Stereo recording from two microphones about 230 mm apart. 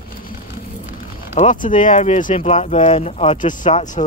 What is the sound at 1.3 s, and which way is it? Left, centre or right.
Speech, left.